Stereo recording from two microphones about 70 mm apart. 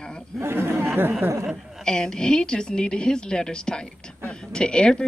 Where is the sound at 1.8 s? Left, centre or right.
Centre.